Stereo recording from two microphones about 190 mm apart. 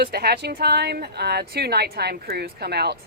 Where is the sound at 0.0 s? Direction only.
55° right (ahead or behind).